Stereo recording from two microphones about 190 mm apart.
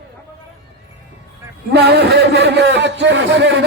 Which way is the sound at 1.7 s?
60° right (ahead or behind).